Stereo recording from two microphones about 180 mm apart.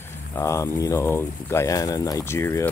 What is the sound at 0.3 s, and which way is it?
Speech, 15° left (ahead or behind).